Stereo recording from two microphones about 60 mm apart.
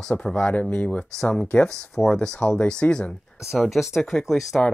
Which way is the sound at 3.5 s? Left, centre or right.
Centre.